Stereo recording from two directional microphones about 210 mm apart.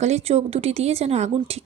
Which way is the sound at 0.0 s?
30° right (ahead or behind).